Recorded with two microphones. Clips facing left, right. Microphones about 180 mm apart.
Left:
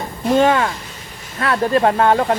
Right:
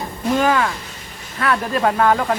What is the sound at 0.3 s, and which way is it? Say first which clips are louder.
Speech: left 3 dB; 25° left (ahead or behind).